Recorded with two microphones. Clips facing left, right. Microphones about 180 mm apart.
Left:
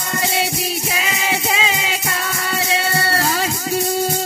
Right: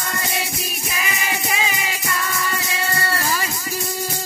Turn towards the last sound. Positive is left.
turn(degrees=70)  # may be behind; listen again after turning